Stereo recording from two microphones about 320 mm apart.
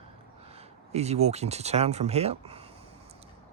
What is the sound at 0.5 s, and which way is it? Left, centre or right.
Speech, centre.